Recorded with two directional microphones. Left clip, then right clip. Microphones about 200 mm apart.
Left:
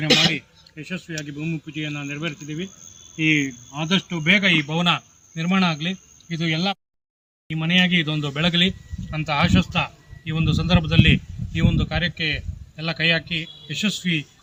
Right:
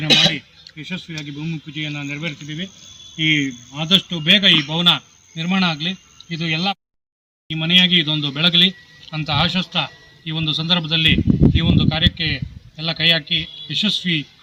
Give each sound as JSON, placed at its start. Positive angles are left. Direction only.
{"t": 0.8, "sound": "speech", "side_deg": -50}
{"t": 3.3, "sound": "speech", "side_deg": -40}
{"t": 4.6, "sound": "a man's voice", "side_deg": -5}